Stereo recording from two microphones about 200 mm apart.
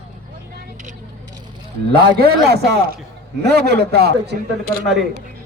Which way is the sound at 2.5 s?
55° right (ahead or behind).